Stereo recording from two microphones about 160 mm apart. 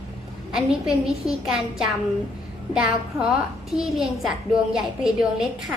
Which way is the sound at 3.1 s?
20° right (ahead or behind).